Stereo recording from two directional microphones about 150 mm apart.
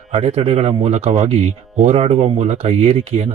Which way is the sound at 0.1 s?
45° right (ahead or behind).